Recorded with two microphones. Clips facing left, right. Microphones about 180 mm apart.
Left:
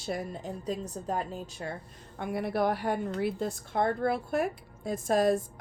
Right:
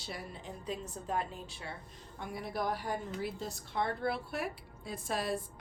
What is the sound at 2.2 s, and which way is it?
Speech, 60° left (ahead or behind).